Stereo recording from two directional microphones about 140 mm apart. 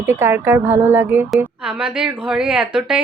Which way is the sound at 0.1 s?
15° right (ahead or behind).